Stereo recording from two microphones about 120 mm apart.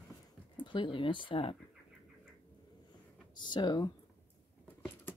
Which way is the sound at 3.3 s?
40° left (ahead or behind).